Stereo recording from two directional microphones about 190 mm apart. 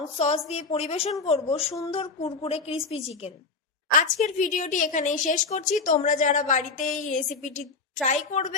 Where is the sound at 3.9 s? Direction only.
40° left (ahead or behind).